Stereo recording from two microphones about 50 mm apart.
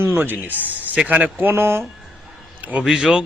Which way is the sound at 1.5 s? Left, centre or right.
Right.